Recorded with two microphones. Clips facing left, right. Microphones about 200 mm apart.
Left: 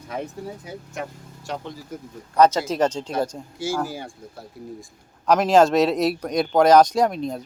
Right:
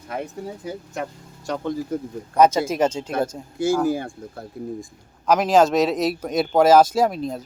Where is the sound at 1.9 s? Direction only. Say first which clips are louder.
Right 9 dB; 55° right (ahead or behind).